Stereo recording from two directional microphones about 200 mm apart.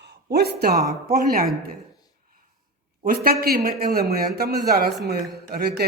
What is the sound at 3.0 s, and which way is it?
A man's voice, 50° right (ahead or behind).